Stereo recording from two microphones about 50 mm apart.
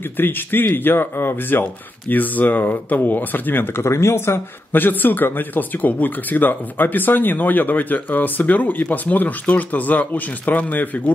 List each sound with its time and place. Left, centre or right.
0.2 s speech: left
4.7 s speech: left